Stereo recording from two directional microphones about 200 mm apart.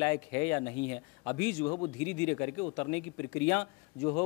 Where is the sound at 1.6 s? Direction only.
25° left (ahead or behind).